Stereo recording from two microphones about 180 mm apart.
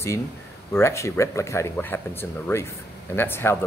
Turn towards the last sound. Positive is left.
turn(degrees=10)  # may be behind; listen again after turning